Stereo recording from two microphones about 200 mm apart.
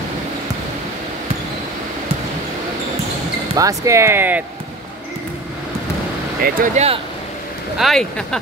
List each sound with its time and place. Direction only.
3.5 s speech: 15° right (ahead or behind)
6.4 s speech: 40° right (ahead or behind)
7.7 s speech: centre (ahead or behind)